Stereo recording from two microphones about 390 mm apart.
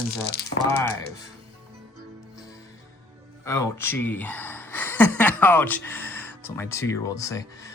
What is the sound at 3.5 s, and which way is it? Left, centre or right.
Speech, centre.